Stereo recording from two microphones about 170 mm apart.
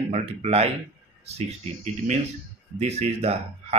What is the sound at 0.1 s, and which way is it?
Speech, 40° right (ahead or behind).